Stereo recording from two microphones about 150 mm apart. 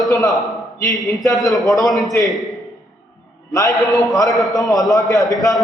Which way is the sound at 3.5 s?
20° left (ahead or behind).